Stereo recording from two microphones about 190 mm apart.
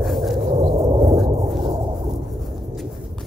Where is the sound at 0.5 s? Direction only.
30° right (ahead or behind).